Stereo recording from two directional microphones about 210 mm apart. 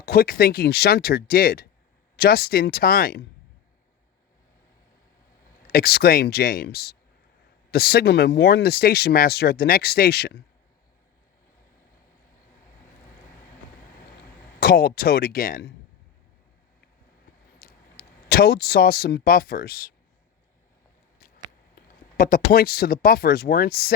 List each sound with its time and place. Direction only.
0.0 s speech: 45° left (ahead or behind)
5.6 s speech: 45° left (ahead or behind)
14.6 s speech: 45° left (ahead or behind)
17.6 s speech: 45° left (ahead or behind)
21.2 s a sound: 40° left (ahead or behind)
22.2 s speech: 45° left (ahead or behind)